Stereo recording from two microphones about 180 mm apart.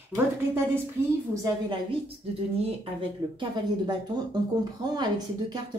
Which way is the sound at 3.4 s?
25° right (ahead or behind).